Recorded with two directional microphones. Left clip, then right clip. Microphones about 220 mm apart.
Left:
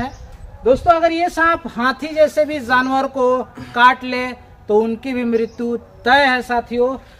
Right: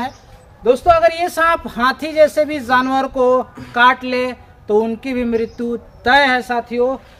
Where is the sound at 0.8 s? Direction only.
50° right (ahead or behind).